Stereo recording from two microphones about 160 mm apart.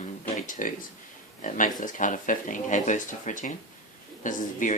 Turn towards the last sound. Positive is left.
turn(degrees=55)  # may be behind; listen again after turning